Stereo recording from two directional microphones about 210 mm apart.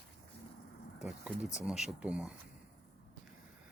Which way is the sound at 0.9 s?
5° right (ahead or behind).